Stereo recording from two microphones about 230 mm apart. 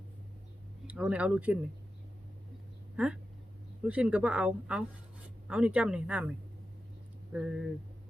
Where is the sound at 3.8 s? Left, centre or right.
Centre.